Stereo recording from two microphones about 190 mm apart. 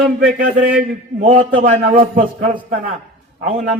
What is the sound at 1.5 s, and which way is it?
A man's voice, 40° right (ahead or behind).